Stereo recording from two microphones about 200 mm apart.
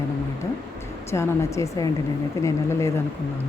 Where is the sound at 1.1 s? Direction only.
15° left (ahead or behind).